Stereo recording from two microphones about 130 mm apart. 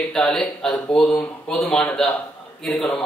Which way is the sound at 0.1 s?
5° left (ahead or behind).